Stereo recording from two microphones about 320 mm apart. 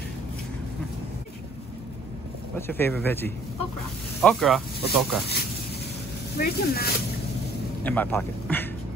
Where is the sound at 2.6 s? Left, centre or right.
Centre.